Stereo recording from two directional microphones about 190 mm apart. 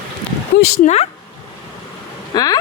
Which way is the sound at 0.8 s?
35° left (ahead or behind).